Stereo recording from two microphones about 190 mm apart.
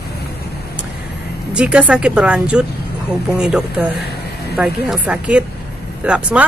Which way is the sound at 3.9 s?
60° left (ahead or behind).